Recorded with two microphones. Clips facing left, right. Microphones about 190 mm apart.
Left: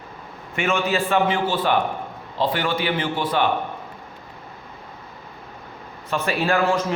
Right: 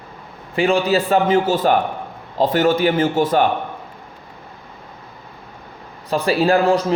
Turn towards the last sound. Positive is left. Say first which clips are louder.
# right 5 dB
turn(degrees=-35)  # may be behind; listen again after turning